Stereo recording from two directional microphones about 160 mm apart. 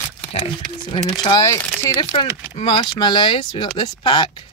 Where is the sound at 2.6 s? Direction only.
30° left (ahead or behind).